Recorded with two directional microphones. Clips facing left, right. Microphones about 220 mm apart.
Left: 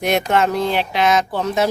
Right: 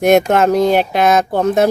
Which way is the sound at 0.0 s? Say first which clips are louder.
Right 7 dB; 45° right (ahead or behind).